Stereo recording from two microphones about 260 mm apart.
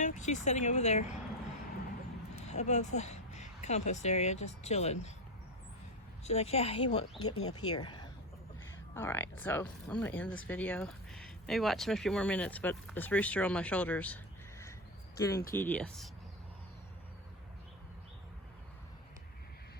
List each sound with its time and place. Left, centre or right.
0.0 s speech: left
2.5 s speech: left
6.2 s speech: left
7.2 s speech: left
7.8 s speech: centre
15.2 s speech: centre